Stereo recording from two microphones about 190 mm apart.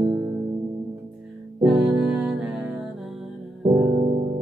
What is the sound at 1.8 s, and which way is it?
Music, 5° right (ahead or behind).